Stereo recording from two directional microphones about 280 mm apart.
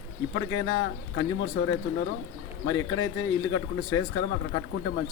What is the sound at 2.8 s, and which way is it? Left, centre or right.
A man's voice, left.